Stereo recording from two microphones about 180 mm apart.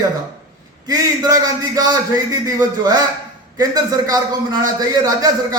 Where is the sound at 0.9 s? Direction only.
20° right (ahead or behind).